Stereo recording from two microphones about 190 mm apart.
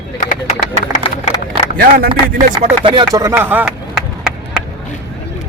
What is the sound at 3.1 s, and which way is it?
Speech, 15° right (ahead or behind).